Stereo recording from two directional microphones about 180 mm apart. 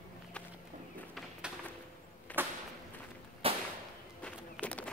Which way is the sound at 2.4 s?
10° right (ahead or behind).